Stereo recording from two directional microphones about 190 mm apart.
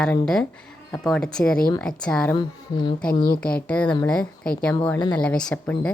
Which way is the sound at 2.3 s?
25° left (ahead or behind).